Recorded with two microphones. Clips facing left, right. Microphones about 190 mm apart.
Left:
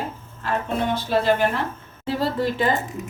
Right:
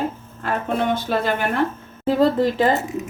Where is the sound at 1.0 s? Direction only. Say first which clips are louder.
Left 2 dB; 50° right (ahead or behind).